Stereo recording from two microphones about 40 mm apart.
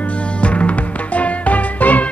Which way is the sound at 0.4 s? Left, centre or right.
Left.